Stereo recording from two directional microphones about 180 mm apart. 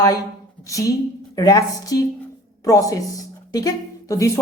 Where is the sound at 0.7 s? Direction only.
20° left (ahead or behind).